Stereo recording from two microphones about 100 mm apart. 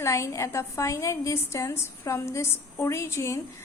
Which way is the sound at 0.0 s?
30° left (ahead or behind).